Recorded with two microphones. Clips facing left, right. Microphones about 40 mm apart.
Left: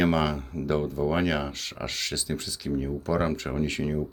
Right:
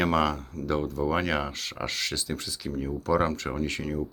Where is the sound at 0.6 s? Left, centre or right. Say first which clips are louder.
Left 2 dB; left.